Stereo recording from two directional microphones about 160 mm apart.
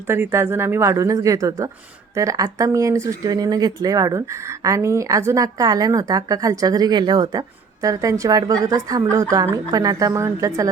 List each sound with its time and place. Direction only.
0.1 s speech: 15° right (ahead or behind)